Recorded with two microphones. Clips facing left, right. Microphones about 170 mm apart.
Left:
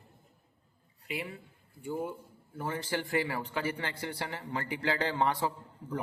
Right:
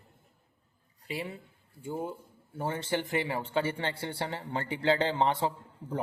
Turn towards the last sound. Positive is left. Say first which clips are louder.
# right 2 dB
turn(degrees=-25)  # may be behind; listen again after turning